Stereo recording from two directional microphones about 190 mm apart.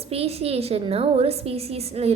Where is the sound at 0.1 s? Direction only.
30° right (ahead or behind).